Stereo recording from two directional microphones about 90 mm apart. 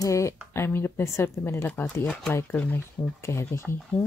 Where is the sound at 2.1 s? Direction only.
10° left (ahead or behind).